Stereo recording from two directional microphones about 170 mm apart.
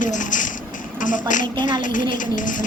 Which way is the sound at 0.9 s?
50° left (ahead or behind).